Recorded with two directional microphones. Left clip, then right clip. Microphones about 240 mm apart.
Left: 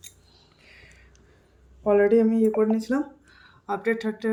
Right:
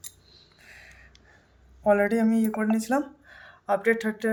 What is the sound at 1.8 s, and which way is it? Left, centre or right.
Speech, right.